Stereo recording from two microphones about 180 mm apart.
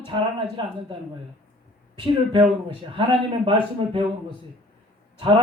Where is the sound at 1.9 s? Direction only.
25° right (ahead or behind).